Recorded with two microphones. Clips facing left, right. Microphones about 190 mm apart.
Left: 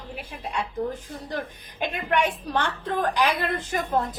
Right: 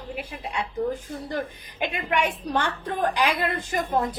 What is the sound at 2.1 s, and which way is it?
A woman's voice, 10° right (ahead or behind).